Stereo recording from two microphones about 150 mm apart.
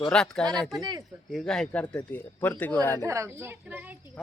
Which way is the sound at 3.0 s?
20° right (ahead or behind).